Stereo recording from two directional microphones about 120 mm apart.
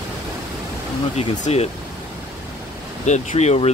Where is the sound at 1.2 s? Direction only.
60° left (ahead or behind).